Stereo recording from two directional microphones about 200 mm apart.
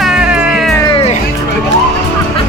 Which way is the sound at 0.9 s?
30° left (ahead or behind).